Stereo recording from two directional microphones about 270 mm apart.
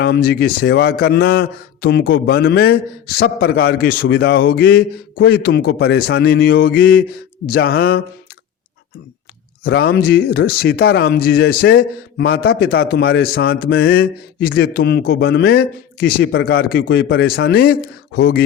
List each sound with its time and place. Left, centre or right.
0.0 s speech: left
9.6 s speech: left